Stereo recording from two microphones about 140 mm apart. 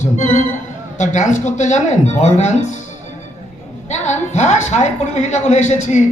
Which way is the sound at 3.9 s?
55° left (ahead or behind).